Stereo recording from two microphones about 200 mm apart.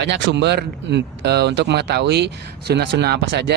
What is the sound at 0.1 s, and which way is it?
Speech, 60° right (ahead or behind).